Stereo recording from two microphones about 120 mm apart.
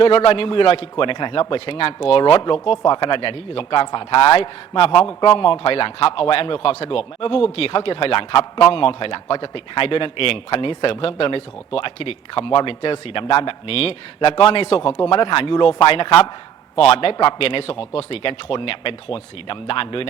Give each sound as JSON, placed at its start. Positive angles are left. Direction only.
{"t": 0.0, "sound": "speech", "side_deg": 50}